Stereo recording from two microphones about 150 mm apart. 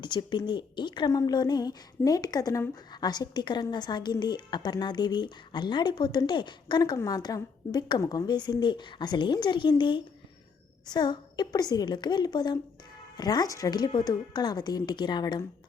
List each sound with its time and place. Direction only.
0.0 s a woman's voice: 30° left (ahead or behind)